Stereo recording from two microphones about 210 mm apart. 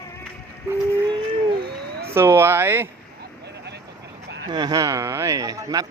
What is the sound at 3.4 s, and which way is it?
Vehicle, 50° right (ahead or behind).